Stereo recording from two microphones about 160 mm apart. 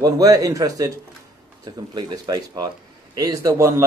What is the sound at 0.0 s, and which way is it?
Speech, 20° right (ahead or behind).